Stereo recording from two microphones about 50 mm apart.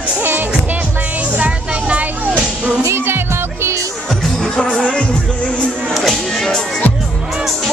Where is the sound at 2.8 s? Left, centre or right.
Right.